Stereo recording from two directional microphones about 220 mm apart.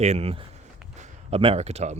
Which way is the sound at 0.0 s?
30° right (ahead or behind).